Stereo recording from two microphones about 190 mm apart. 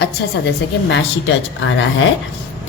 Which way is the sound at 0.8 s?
75° left (ahead or behind).